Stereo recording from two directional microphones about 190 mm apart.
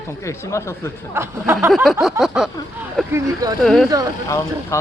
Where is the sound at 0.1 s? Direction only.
15° left (ahead or behind).